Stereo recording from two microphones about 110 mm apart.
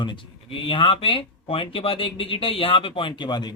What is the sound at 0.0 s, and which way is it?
Speech, 50° left (ahead or behind).